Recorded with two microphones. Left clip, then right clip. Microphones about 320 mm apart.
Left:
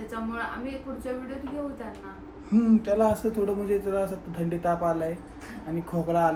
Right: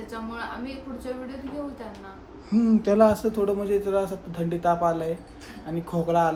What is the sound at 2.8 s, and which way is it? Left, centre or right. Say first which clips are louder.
Speech: right 7 dB; right.